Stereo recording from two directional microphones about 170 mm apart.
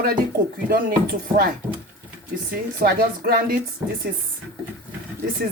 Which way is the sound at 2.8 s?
65° right (ahead or behind).